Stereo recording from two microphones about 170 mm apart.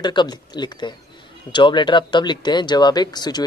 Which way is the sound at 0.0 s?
25° left (ahead or behind).